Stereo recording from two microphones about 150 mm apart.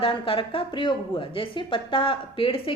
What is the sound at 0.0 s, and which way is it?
A woman's voice, 35° left (ahead or behind).